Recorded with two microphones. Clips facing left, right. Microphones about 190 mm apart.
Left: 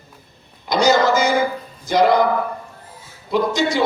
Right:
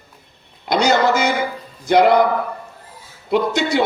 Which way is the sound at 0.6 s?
60° right (ahead or behind).